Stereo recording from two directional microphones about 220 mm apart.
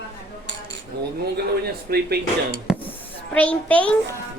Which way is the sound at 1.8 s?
45° right (ahead or behind).